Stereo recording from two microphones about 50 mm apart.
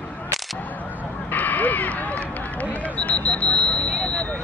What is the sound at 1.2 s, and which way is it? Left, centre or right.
Run, left.